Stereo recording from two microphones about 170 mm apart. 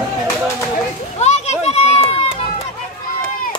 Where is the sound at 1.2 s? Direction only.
40° left (ahead or behind).